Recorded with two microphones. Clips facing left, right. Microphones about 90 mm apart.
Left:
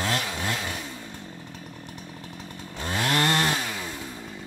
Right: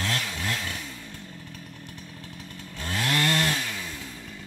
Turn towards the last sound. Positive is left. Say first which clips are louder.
# left 2 dB
turn(degrees=30)  # may be behind; listen again after turning